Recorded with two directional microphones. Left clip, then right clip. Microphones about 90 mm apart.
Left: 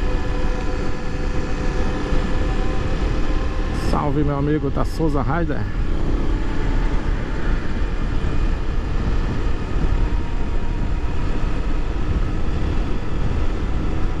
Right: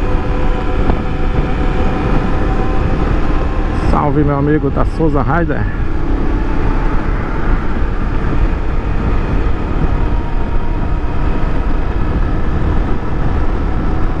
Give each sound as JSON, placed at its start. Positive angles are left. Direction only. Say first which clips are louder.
{"t": 3.8, "sound": "vehicle", "louder": "right 7 dB", "side_deg": 15}
{"t": 4.5, "sound": "speech", "louder": "right 7 dB", "side_deg": 20}